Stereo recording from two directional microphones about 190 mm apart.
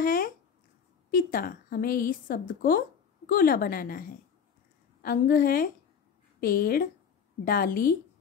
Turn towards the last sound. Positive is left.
turn(degrees=50)  # may be behind; listen again after turning